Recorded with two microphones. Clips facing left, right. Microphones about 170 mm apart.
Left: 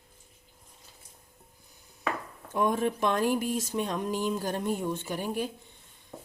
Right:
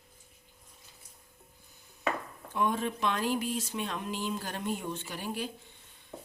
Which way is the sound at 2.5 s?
45° left (ahead or behind).